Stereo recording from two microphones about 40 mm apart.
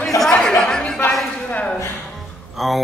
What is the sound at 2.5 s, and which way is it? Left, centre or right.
Speech, centre.